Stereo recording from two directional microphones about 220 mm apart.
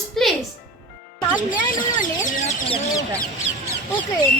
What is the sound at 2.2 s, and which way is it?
Speech, 30° left (ahead or behind).